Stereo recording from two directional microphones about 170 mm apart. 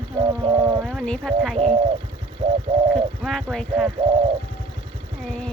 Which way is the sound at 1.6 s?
35° right (ahead or behind).